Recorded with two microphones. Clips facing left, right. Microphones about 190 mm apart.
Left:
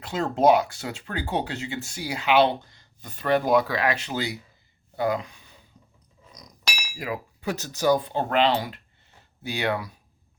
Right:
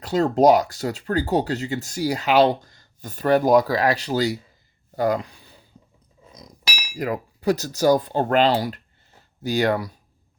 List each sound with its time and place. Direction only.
0.0 s speech: 40° right (ahead or behind)
5.7 s a sound: 30° right (ahead or behind)
6.9 s speech: 45° right (ahead or behind)